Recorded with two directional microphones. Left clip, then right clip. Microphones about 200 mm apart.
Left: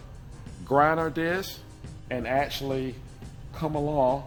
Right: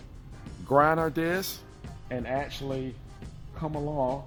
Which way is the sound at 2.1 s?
30° right (ahead or behind).